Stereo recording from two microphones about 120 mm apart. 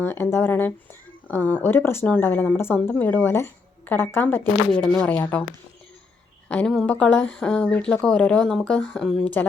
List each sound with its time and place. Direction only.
0.0 s speech: 20° left (ahead or behind)
4.7 s speech: 5° left (ahead or behind)
6.5 s speech: 5° left (ahead or behind)